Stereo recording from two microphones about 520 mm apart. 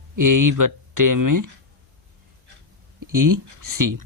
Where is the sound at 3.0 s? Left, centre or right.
Right.